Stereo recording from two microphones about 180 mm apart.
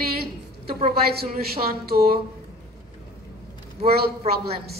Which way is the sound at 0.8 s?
55° right (ahead or behind).